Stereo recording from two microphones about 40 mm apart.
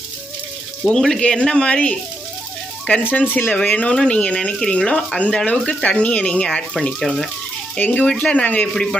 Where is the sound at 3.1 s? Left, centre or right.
Left.